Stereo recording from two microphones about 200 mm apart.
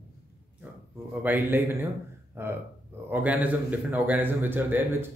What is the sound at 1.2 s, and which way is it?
A man's voice, 10° right (ahead or behind).